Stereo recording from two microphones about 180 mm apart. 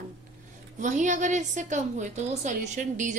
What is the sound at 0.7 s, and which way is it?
A woman's voice, 45° right (ahead or behind).